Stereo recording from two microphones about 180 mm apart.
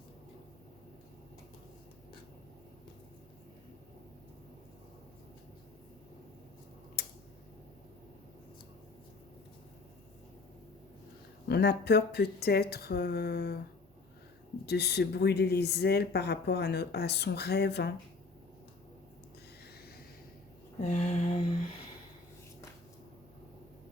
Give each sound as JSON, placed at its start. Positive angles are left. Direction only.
{"t": 7.0, "sound": "tick-tock", "side_deg": 65}
{"t": 11.4, "sound": "speech", "side_deg": 65}
{"t": 14.7, "sound": "speech", "side_deg": 65}
{"t": 20.8, "sound": "a sound", "side_deg": 35}